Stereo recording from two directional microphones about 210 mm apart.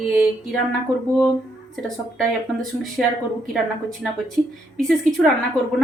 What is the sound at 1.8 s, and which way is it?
A woman's voice, centre (ahead or behind).